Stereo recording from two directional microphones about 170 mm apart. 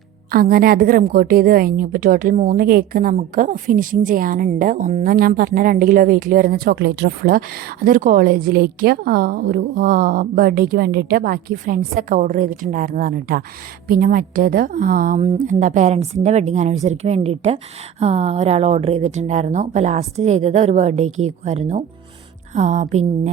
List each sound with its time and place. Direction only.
0.3 s a woman's voice: 60° right (ahead or behind); by 23.3 s 40° right (ahead or behind)